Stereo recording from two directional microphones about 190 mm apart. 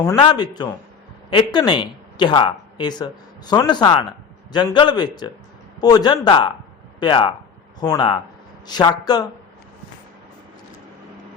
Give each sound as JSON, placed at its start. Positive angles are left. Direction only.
{"t": 0.2, "sound": "a man's voice", "side_deg": 25}